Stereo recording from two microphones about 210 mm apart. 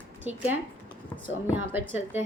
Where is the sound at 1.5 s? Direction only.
10° right (ahead or behind).